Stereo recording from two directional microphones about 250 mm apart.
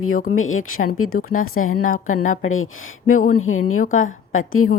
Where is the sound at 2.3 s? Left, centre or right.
Left.